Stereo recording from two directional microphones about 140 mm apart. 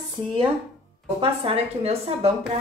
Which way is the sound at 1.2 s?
40° right (ahead or behind).